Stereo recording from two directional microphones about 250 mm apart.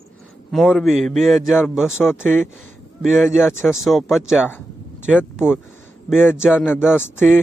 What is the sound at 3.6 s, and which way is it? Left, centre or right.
A man's voice, centre.